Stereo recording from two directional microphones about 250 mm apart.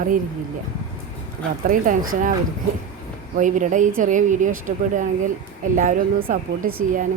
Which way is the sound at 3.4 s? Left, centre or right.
Right.